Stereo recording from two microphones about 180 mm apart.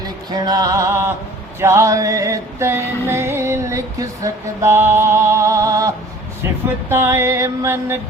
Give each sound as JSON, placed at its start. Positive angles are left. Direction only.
{"t": 0.0, "sound": "music", "side_deg": -20}
{"t": 6.9, "sound": "music", "side_deg": -15}